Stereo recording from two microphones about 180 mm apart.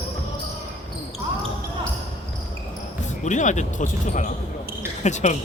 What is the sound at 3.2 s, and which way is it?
Speech, 40° left (ahead or behind).